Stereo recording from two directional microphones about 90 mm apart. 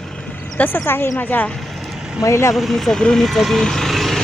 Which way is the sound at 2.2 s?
35° left (ahead or behind).